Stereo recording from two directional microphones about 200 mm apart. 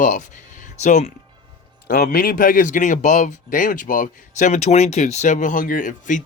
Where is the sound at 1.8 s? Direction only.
50° left (ahead or behind).